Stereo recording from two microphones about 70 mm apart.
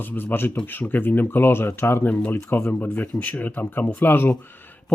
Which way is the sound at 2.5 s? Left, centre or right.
Left.